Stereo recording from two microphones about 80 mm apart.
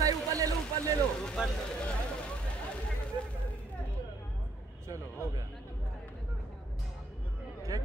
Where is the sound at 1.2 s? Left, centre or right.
Centre.